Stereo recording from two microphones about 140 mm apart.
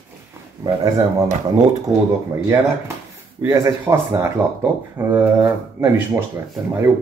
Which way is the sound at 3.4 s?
20° right (ahead or behind).